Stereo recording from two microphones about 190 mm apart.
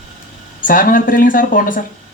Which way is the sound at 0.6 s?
45° left (ahead or behind).